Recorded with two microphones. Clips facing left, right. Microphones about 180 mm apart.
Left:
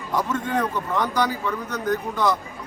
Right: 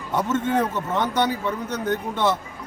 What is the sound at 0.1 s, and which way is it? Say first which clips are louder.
Speech: right 2 dB; 25° right (ahead or behind).